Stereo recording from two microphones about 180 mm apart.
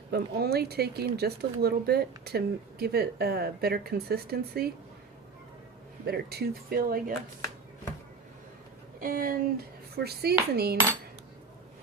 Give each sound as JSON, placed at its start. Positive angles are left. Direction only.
{"t": 0.1, "sound": "speech", "side_deg": -60}
{"t": 6.1, "sound": "speech", "side_deg": -60}
{"t": 9.0, "sound": "speech", "side_deg": -50}